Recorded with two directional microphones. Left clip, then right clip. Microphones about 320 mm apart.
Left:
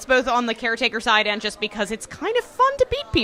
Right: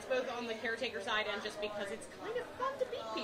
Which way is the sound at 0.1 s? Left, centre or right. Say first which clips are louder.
Left 18 dB; left.